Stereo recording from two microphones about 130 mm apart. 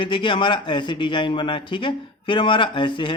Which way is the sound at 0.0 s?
40° left (ahead or behind).